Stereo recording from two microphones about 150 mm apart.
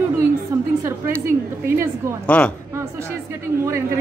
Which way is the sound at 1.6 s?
20° right (ahead or behind).